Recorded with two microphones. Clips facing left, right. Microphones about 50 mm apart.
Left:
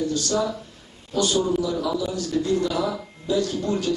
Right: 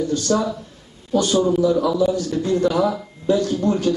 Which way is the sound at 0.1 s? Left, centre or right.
Right.